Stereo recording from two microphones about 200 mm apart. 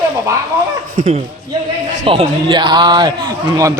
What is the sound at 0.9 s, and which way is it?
Speech, 40° right (ahead or behind).